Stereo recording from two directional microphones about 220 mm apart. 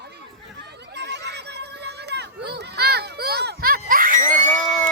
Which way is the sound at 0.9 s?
50° right (ahead or behind).